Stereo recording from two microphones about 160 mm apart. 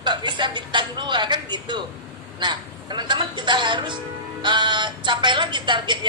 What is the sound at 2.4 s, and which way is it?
A man's voice, 30° right (ahead or behind).